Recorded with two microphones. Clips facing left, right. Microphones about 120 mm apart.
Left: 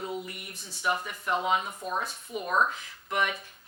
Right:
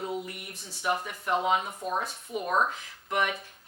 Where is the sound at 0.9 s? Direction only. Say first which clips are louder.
Right 1 dB; 40° right (ahead or behind).